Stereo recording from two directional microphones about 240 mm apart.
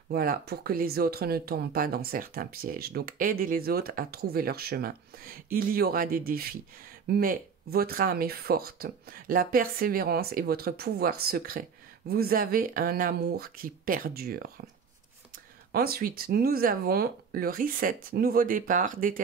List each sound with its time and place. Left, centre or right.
0.1 s speech: right